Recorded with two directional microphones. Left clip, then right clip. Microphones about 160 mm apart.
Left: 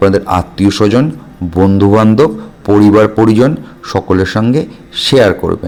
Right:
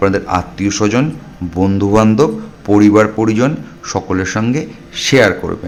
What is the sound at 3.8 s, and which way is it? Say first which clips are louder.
A man's voice: left 5 dB; 25° left (ahead or behind).